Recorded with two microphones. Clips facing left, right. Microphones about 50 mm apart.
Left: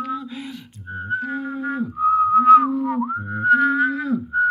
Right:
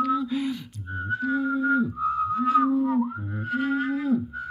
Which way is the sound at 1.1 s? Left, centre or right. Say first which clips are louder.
Even; left.